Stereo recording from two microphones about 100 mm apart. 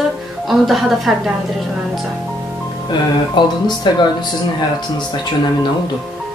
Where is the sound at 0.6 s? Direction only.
Centre (ahead or behind).